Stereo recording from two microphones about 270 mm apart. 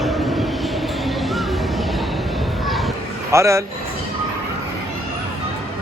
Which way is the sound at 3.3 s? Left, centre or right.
Centre.